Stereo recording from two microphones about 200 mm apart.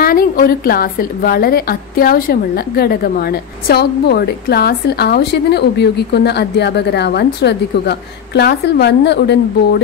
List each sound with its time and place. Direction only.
0.0 s a woman's voice: 45° left (ahead or behind)